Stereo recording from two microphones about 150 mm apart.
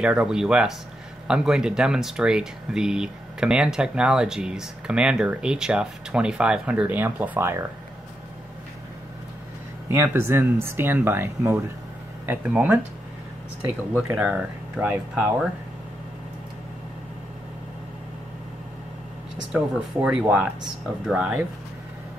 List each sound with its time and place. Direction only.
0.0 s speech: 5° right (ahead or behind)
9.8 s speech: 15° right (ahead or behind)
19.5 s speech: 5° right (ahead or behind)